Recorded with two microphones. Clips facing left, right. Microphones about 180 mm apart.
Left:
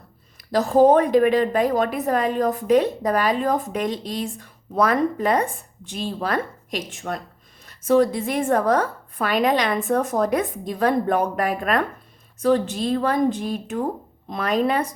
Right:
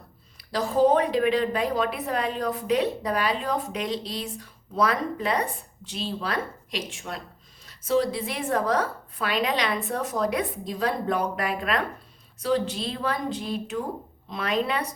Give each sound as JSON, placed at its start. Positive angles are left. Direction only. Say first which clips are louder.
{"t": 0.5, "sound": "a woman's voice", "louder": "left 6 dB", "side_deg": 50}